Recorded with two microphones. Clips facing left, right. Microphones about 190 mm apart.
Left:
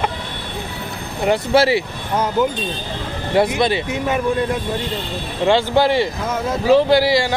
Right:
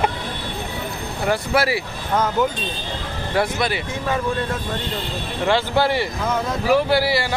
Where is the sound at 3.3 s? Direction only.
25° left (ahead or behind).